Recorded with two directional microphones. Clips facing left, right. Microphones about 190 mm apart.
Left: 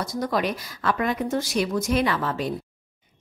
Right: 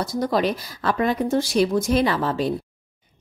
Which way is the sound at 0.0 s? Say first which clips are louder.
Right 4 dB; 30° right (ahead or behind).